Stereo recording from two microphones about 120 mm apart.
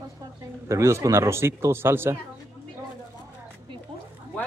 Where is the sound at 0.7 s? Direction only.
25° right (ahead or behind).